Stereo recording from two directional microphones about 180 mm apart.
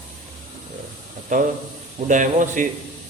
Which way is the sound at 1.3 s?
45° right (ahead or behind).